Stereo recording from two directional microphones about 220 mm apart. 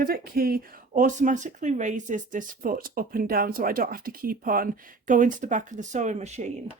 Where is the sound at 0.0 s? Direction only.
45° right (ahead or behind).